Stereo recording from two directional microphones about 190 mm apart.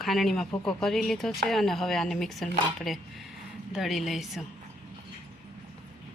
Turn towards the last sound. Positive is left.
turn(degrees=0)  # may be behind; listen again after turning